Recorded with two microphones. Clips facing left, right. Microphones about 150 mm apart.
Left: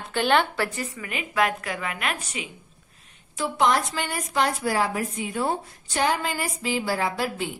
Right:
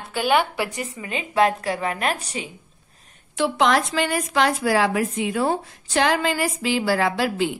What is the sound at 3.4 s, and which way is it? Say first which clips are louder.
A woman's voice: right 3 dB; 90° right.